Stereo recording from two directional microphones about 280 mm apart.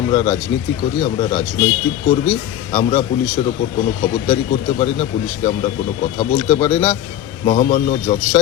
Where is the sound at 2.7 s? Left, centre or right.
Left.